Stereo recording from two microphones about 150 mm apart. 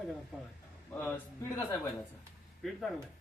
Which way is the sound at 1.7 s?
20° left (ahead or behind).